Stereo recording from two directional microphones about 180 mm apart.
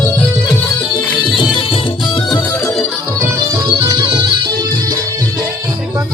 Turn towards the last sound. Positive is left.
turn(degrees=-25)  # may be behind; listen again after turning